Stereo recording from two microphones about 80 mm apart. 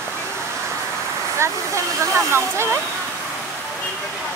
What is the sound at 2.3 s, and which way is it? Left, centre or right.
Speech, right.